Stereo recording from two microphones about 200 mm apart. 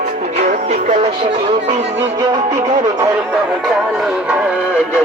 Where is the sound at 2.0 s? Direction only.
25° right (ahead or behind).